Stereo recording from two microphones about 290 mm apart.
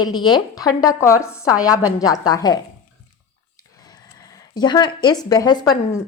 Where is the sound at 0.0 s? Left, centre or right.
Centre.